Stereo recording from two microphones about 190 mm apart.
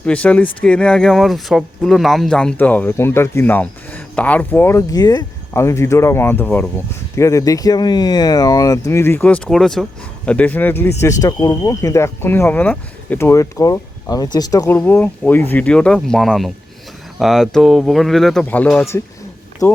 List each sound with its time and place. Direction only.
0.0 s speech: 5° left (ahead or behind)